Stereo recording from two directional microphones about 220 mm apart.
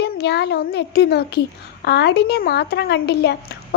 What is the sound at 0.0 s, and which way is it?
A child's voice, 50° left (ahead or behind).